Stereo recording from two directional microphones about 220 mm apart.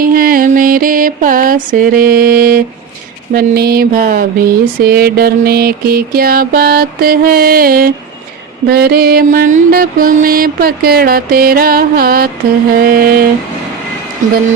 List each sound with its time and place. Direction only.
0.0 s mantra: 40° right (ahead or behind)
3.3 s a sound: 45° right (ahead or behind)
8.6 s mantra: 45° right (ahead or behind)